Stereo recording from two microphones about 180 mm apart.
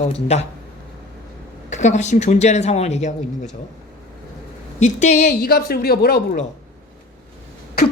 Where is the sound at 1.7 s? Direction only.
40° left (ahead or behind).